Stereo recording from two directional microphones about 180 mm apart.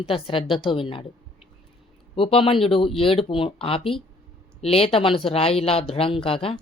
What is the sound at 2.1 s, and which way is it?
A woman's voice, 30° left (ahead or behind).